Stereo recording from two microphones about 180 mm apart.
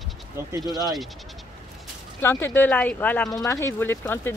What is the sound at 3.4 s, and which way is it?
Speech, 15° left (ahead or behind).